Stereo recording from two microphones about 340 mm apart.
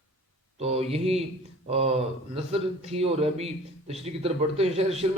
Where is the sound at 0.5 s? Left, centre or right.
Centre.